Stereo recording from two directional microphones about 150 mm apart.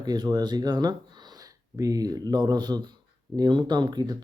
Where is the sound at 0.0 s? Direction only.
30° right (ahead or behind).